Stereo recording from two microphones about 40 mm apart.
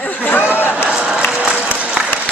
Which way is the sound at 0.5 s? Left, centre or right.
Left.